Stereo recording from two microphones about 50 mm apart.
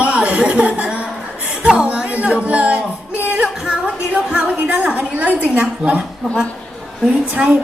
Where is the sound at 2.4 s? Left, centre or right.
Right.